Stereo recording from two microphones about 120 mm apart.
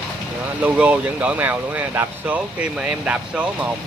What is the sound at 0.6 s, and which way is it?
Speech, 10° right (ahead or behind).